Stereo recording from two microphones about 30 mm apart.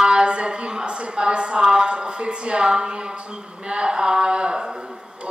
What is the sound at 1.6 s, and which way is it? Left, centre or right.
A woman's voice, right.